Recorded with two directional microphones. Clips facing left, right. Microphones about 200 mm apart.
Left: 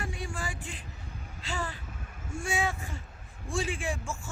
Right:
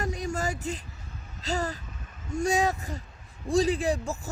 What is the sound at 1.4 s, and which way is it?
A man's voice, 40° right (ahead or behind).